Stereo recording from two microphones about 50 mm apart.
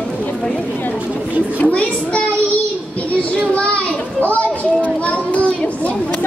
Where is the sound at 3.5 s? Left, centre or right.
Left.